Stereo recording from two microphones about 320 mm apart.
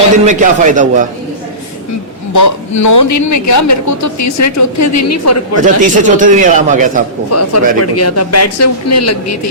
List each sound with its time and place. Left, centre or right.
0.3 s a man's voice: right
2.3 s a woman's voice: left
5.6 s a man's voice: right
7.3 s speech: left